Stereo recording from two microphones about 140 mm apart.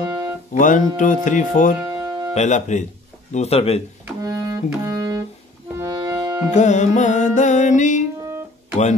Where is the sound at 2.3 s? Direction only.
60° left (ahead or behind).